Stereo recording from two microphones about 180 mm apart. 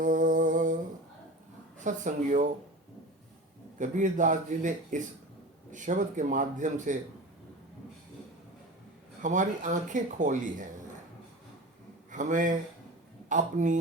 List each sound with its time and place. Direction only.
0.0 s humming: 45° right (ahead or behind)
1.8 s speech: 45° right (ahead or behind)
3.8 s speech: 45° right (ahead or behind)
9.2 s speech: 45° right (ahead or behind)
12.1 s speech: 45° right (ahead or behind)